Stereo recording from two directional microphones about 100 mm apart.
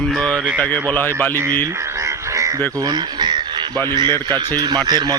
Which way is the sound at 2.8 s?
45° right (ahead or behind).